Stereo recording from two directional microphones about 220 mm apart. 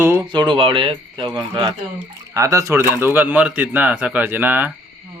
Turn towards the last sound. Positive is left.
turn(degrees=-10)  # may be behind; listen again after turning